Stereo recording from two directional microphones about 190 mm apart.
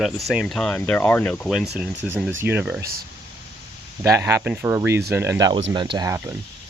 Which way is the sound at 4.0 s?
15° right (ahead or behind).